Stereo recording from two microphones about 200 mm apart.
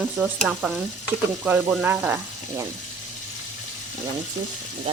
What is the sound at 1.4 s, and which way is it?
Speech, 5° right (ahead or behind).